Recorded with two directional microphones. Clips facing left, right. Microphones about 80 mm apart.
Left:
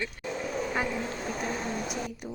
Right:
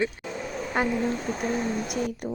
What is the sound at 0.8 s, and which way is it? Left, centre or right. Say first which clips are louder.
Speech: right 7 dB; right.